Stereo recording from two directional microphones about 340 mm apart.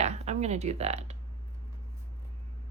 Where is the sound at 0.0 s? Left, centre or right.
Centre.